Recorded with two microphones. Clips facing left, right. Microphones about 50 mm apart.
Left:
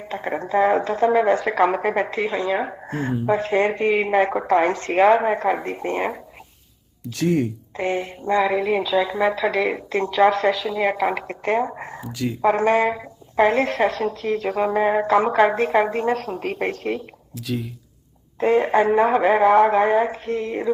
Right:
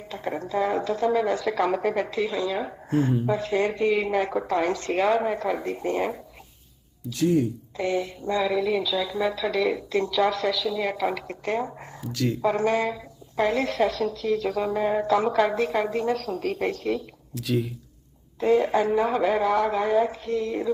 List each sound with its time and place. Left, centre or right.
0.1 s a woman's voice: left
7.0 s speech: left
7.8 s a woman's voice: left
12.0 s speech: centre
12.4 s a woman's voice: left
17.3 s speech: centre
18.3 s a woman's voice: left